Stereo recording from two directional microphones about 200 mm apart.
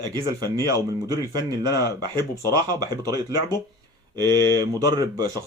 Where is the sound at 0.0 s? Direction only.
20° right (ahead or behind).